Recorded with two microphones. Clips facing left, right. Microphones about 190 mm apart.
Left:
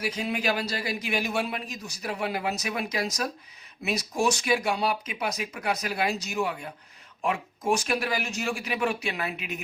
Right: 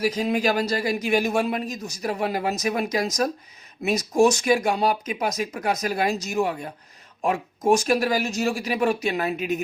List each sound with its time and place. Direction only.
0.0 s a man's voice: 40° right (ahead or behind)